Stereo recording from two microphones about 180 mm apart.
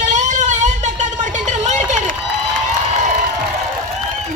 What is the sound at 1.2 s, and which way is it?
Run, 40° right (ahead or behind).